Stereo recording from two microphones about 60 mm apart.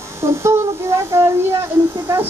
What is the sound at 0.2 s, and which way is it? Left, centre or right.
Speech, right.